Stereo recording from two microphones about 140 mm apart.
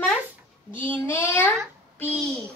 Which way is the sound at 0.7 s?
15° left (ahead or behind).